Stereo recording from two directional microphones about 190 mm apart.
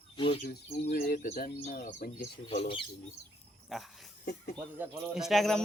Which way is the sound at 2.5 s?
30° left (ahead or behind).